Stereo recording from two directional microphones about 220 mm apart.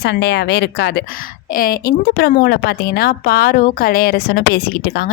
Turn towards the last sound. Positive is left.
turn(degrees=50)  # may be behind; listen again after turning